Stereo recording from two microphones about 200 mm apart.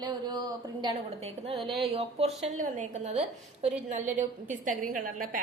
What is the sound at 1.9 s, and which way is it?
A woman's voice, 30° right (ahead or behind).